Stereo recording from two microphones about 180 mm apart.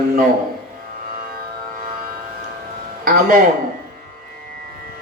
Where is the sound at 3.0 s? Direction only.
50° right (ahead or behind).